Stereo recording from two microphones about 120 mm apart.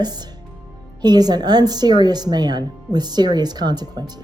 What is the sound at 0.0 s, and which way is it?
Speech, 35° right (ahead or behind).